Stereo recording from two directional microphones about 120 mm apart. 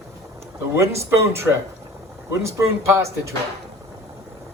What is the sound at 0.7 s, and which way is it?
Speech, 25° right (ahead or behind).